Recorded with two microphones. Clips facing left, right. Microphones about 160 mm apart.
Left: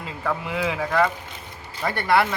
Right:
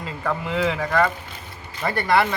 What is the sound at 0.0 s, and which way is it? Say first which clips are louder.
Speech: right 1 dB; 10° left (ahead or behind).